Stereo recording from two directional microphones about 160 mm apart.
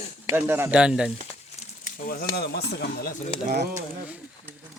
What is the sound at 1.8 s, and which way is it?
Speech, 60° left (ahead or behind).